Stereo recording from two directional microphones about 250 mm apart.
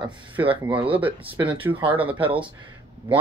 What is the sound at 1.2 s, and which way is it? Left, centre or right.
Speech, right.